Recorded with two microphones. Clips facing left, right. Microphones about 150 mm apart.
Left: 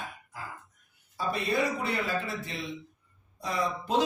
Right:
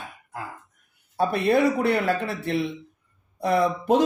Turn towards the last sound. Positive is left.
turn(degrees=-55)  # may be behind; listen again after turning